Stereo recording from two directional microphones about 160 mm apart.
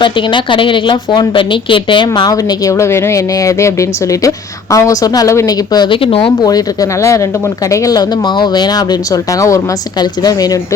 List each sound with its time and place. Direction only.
0.0 s a woman's voice: 30° left (ahead or behind)
7.0 s a woman's voice: 20° left (ahead or behind)